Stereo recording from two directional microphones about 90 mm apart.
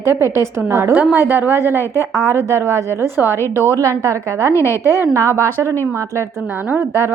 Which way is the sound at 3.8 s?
35° right (ahead or behind).